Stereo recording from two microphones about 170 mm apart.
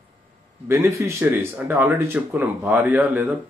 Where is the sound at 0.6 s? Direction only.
15° right (ahead or behind).